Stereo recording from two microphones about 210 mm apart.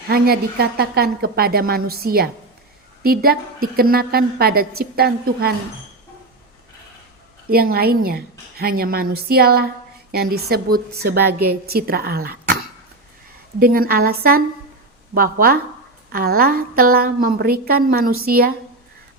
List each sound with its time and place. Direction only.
0.1 s a woman's voice: 45° right (ahead or behind)
7.5 s a woman's voice: 45° right (ahead or behind)
13.6 s a woman's voice: 45° right (ahead or behind)